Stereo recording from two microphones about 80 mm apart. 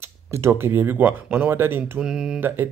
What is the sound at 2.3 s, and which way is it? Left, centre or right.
Speech, right.